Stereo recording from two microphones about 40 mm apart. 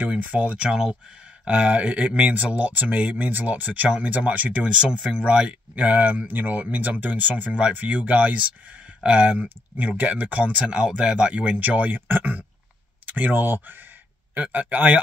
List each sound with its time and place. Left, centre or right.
0.0 s speech: right
0.7 s speech: centre
1.4 s speech: right
4.2 s speech: right
11.0 s speech: right
11.3 s speech: right
14.3 s speech: right